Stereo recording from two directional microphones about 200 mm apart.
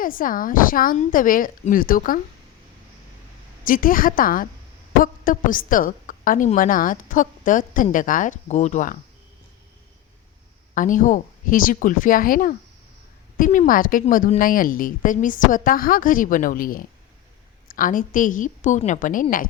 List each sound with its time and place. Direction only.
0.0 s a woman's voice: 45° left (ahead or behind)
3.6 s a woman's voice: 45° left (ahead or behind)
10.8 s a woman's voice: 40° left (ahead or behind)